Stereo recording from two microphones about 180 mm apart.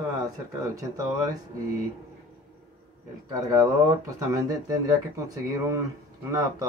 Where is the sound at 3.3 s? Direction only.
20° right (ahead or behind).